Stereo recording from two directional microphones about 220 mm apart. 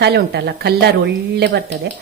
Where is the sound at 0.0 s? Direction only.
50° right (ahead or behind).